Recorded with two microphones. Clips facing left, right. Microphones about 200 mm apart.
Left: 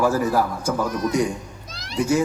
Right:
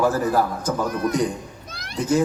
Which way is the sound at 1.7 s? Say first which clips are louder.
Right 1 dB; 60° right (ahead or behind).